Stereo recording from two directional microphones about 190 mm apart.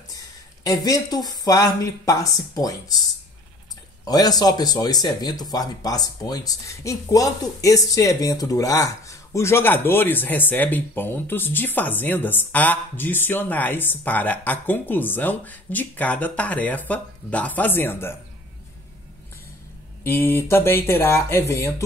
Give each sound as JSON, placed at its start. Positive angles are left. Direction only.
{"t": 0.8, "sound": "speech", "side_deg": 20}
{"t": 4.0, "sound": "speech", "side_deg": 20}
{"t": 20.0, "sound": "speech", "side_deg": 10}